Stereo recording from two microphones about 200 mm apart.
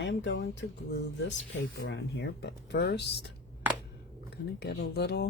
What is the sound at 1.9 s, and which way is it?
Speech, 60° left (ahead or behind).